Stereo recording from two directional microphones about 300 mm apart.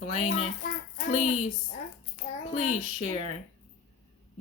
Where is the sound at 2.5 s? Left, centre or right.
Left.